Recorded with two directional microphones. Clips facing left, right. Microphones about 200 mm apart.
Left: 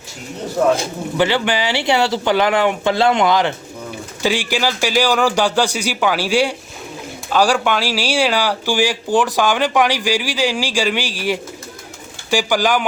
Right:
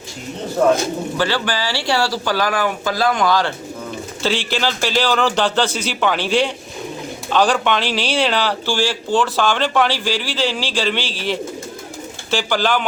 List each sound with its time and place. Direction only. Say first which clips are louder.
0.6 s speech: right 1 dB; centre (ahead or behind)
1.1 s speech: left 7 dB; 20° left (ahead or behind)